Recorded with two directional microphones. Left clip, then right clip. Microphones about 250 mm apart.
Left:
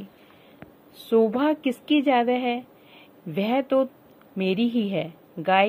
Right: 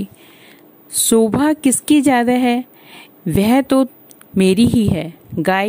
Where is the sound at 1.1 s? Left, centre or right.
Right.